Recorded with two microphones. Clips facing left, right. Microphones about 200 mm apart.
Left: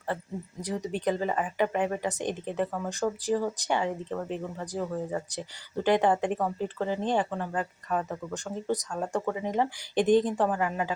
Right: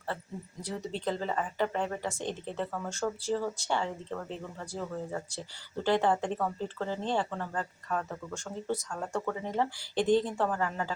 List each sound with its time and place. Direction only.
0.6 s speech: 15° left (ahead or behind)